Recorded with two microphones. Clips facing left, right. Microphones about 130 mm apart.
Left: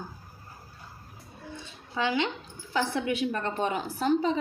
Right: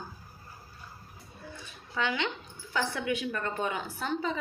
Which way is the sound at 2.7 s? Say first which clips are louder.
Left 3 dB; 25° left (ahead or behind).